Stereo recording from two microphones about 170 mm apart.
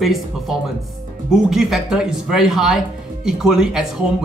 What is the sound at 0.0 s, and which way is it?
Speech, centre (ahead or behind).